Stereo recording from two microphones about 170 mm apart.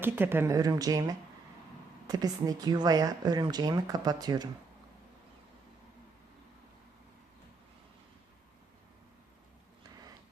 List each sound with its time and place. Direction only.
0.0 s speech: 15° right (ahead or behind)